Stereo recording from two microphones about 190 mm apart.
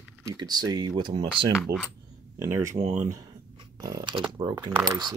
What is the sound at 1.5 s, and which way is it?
Speech, centre (ahead or behind).